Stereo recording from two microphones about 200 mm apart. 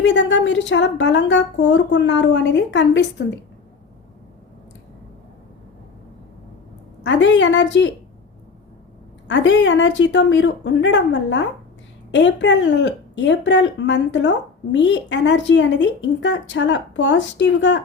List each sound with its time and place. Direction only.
0.0 s speech: 65° left (ahead or behind)
7.0 s speech: 65° left (ahead or behind)
9.2 s speech: 65° left (ahead or behind)